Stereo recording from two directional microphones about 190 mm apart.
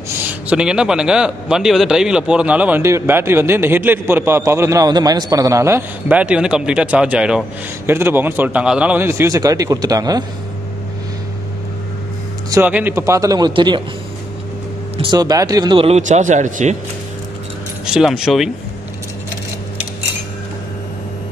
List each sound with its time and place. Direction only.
0.3 s a man's voice: 5° right (ahead or behind)
12.4 s a man's voice: 10° right (ahead or behind)
15.0 s speech: 20° right (ahead or behind); by 16.7 s 40° right (ahead or behind)
17.8 s speech: 5° right (ahead or behind)